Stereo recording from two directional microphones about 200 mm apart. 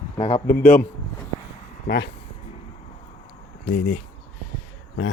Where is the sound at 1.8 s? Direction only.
55° left (ahead or behind).